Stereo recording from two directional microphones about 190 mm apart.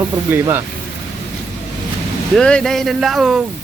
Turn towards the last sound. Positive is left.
turn(degrees=0)  # may be behind; listen again after turning